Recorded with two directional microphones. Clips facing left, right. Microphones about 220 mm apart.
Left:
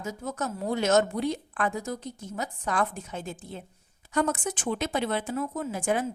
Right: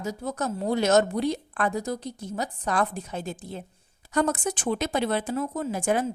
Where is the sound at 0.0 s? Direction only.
35° right (ahead or behind).